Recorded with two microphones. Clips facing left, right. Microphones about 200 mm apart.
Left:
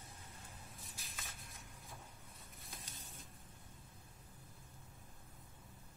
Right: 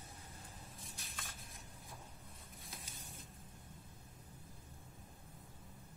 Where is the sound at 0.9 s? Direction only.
Centre (ahead or behind).